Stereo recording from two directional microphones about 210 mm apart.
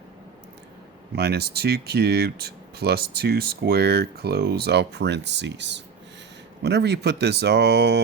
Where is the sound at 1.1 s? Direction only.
50° right (ahead or behind).